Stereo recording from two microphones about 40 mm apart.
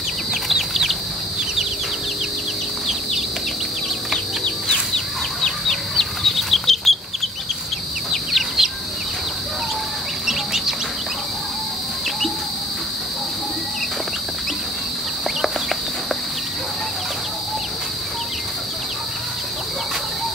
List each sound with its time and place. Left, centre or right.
0.3 s chicken: centre
4.9 s chicken: centre
8.1 s chicken: centre